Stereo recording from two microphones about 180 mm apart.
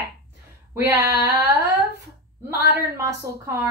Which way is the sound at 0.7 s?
10° right (ahead or behind).